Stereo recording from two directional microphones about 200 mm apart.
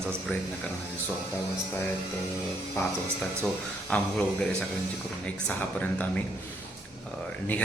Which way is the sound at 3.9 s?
5° left (ahead or behind).